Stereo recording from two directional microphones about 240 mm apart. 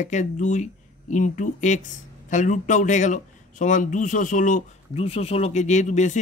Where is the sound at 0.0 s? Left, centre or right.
Left.